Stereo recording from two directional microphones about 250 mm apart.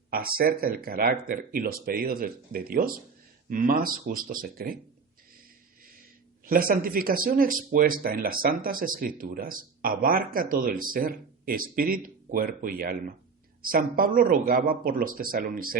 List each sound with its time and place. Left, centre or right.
0.1 s speech: right
6.4 s speech: right